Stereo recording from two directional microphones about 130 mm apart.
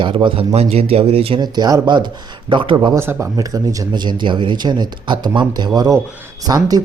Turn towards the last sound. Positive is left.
turn(degrees=-30)  # may be behind; listen again after turning